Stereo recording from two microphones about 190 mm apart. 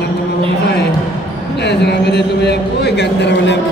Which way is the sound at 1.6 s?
65° left (ahead or behind).